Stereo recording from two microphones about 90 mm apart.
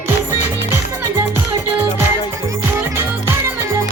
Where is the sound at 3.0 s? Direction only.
25° right (ahead or behind).